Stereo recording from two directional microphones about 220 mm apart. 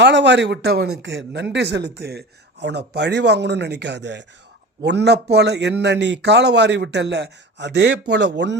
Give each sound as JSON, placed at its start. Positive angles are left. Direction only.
{"t": 0.0, "sound": "a man's voice", "side_deg": -55}